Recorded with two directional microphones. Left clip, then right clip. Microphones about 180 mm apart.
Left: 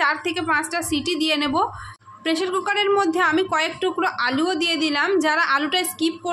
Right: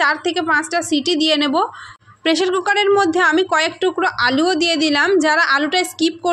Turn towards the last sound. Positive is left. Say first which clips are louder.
# right 6 dB
turn(degrees=-30)  # may be behind; listen again after turning